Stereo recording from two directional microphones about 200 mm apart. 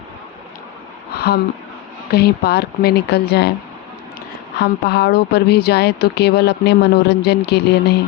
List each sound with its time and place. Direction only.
1.1 s a sound: 55° left (ahead or behind)
2.0 s speech: 55° left (ahead or behind)
4.6 s speech: 55° left (ahead or behind)